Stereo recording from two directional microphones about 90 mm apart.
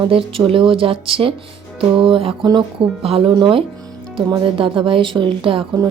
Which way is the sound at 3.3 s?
60° right (ahead or behind).